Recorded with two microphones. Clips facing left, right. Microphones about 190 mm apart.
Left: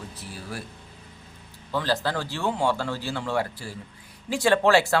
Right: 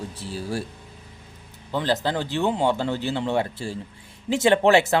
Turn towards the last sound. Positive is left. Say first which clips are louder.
# right 2 dB
turn(degrees=-20)  # may be behind; listen again after turning